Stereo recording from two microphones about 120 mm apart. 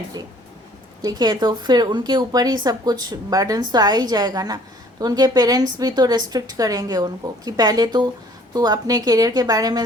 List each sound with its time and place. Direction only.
1.0 s a woman's voice: 35° right (ahead or behind)